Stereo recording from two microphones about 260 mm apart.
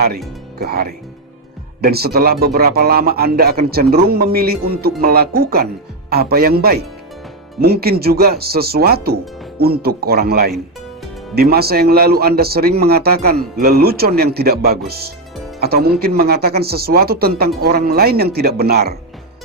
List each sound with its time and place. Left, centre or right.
0.6 s a man's voice: right